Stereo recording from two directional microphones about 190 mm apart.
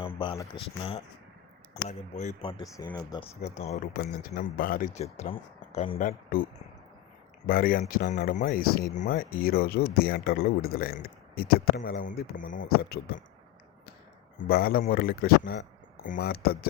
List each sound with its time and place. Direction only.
0.2 s speech: 25° left (ahead or behind); by 2.3 s 40° left (ahead or behind)
2.4 s speech: 30° left (ahead or behind)
3.4 s speech: 35° left (ahead or behind)
3.9 s speech: 55° left (ahead or behind)
5.1 s speech: 35° left (ahead or behind)
6.0 s speech: 50° left (ahead or behind)
14.3 s speech: 55° left (ahead or behind)